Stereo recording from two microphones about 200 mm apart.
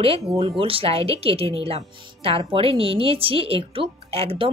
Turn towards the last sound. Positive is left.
turn(degrees=-30)  # may be behind; listen again after turning